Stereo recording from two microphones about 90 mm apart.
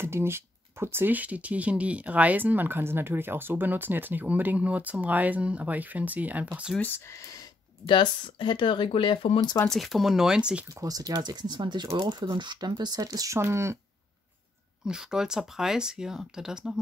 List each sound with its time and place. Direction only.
0.0 s speech: 30° right (ahead or behind)
6.8 s speech: 25° left (ahead or behind)
7.2 s speech: 40° left (ahead or behind)
7.8 s speech: 65° left (ahead or behind)
9.7 s speech: centre (ahead or behind)
10.7 s speech: 40° right (ahead or behind)
14.9 s speech: 5° right (ahead or behind)